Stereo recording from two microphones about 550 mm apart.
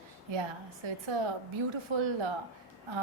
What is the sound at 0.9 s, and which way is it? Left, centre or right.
A woman's voice, right.